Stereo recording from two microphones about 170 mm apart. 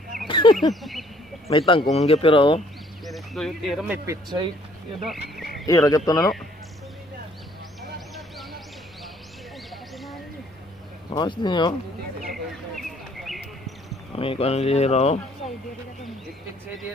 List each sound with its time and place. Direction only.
0.3 s a sound: 30° left (ahead or behind)
1.7 s speech: 35° left (ahead or behind)
3.1 s speech: centre (ahead or behind)
3.9 s speech: 20° right (ahead or behind)
5.4 s a sound: centre (ahead or behind)
5.7 s speech: 20° left (ahead or behind)
11.1 s speech: 25° left (ahead or behind)
12.3 s bird: centre (ahead or behind)
14.1 s speech: 35° left (ahead or behind)